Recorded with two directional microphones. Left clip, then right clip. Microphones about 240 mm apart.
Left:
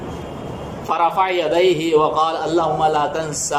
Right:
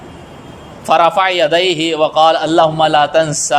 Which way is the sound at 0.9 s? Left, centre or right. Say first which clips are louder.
Right 6 dB; right.